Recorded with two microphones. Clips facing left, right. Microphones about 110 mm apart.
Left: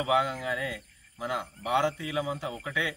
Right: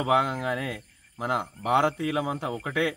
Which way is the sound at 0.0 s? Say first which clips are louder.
Right 3 dB; 50° right (ahead or behind).